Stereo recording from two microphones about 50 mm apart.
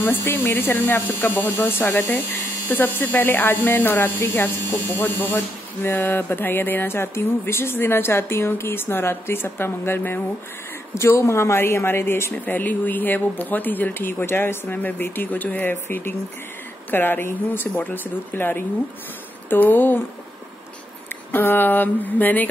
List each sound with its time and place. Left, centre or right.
0.0 s speech: left
11.1 s speech: left
12.4 s speech: left
21.1 s speech: left